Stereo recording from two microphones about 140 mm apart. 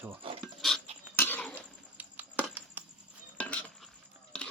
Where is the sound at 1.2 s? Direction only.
15° left (ahead or behind).